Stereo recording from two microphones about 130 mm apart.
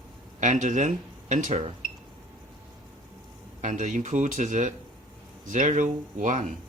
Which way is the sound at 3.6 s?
70° right (ahead or behind).